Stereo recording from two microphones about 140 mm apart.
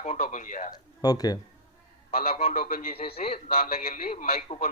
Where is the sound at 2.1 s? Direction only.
45° left (ahead or behind).